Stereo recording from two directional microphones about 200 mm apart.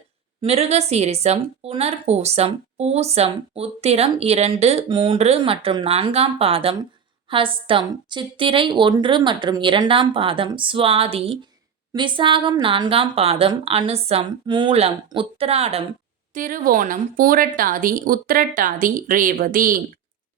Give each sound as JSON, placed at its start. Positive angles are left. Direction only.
{"t": 0.4, "sound": "a woman's voice", "side_deg": -30}
{"t": 16.3, "sound": "a woman's voice", "side_deg": -40}